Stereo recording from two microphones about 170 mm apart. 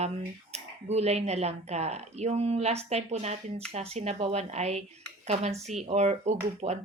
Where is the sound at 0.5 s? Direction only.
40° right (ahead or behind).